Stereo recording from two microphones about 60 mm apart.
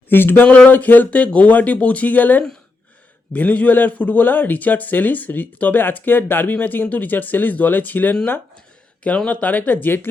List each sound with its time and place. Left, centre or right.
0.1 s speech: left
0.4 s a man's voice: centre
9.0 s a man's voice: centre